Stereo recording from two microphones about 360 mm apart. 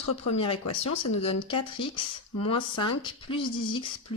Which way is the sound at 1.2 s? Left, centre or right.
Centre.